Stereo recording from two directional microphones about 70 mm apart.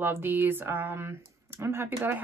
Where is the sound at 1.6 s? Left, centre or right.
Right.